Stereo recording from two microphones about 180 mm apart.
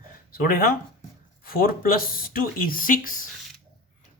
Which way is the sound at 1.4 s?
55° left (ahead or behind).